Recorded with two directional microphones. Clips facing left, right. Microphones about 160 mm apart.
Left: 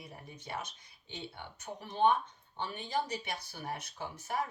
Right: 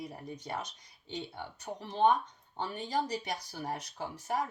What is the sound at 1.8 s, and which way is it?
Speech, 30° right (ahead or behind).